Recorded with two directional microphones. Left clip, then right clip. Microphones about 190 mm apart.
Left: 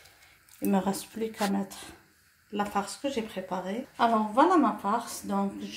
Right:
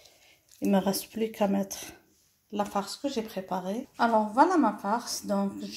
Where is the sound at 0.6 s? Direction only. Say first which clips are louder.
Right 2 dB; 30° right (ahead or behind).